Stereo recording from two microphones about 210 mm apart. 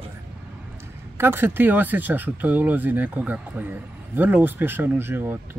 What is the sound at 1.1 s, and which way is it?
Speech, 10° right (ahead or behind).